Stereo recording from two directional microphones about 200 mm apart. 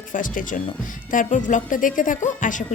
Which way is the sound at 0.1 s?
40° left (ahead or behind).